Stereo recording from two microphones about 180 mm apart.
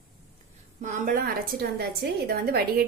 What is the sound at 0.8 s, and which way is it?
A woman's voice, 45° right (ahead or behind).